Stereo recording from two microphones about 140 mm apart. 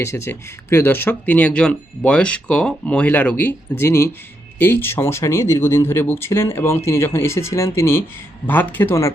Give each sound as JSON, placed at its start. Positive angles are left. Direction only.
{"t": 0.0, "sound": "speech", "side_deg": 20}